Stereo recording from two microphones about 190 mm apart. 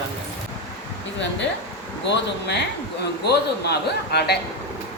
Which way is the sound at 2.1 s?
60° left (ahead or behind).